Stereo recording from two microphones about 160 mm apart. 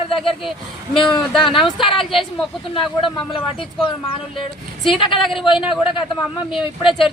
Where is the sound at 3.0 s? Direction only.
30° left (ahead or behind).